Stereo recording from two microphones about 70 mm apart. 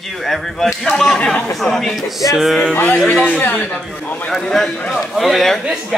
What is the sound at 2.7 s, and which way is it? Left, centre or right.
Speech, left.